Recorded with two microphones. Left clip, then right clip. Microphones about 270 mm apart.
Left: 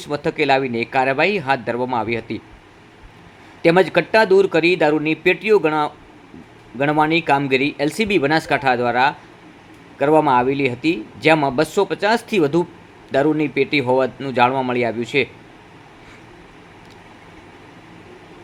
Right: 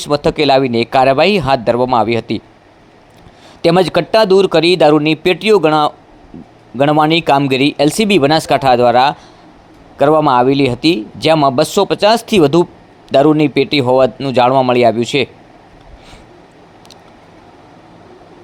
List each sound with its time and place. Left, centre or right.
0.0 s a man's voice: right
3.6 s a man's voice: right